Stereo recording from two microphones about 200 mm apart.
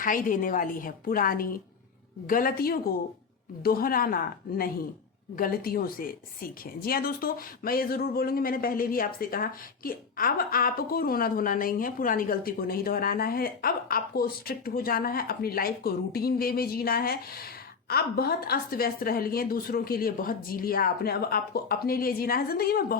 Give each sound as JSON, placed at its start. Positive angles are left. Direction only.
{"t": 0.0, "sound": "a woman's voice", "side_deg": 40}